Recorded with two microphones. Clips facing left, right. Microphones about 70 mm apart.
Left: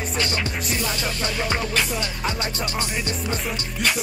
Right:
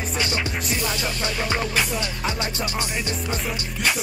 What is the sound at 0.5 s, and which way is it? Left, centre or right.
Music, centre.